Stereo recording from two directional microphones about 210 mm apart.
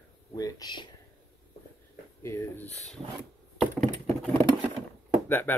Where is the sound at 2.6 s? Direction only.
30° left (ahead or behind).